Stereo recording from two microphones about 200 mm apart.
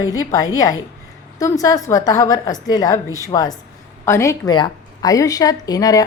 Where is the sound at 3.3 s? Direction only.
20° left (ahead or behind).